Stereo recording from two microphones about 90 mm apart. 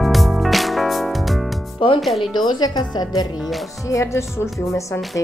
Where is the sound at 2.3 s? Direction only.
50° left (ahead or behind).